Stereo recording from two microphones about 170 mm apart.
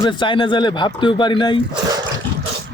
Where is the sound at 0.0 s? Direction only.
25° left (ahead or behind).